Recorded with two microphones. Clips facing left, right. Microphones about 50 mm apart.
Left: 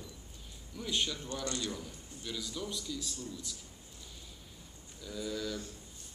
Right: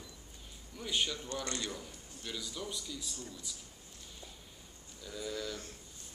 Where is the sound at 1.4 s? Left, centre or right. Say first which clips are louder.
Left 5 dB; right.